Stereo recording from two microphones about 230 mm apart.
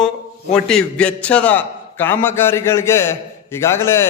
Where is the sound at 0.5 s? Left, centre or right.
Centre.